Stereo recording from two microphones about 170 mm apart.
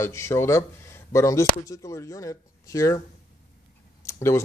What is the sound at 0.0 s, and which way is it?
Speech, 15° left (ahead or behind).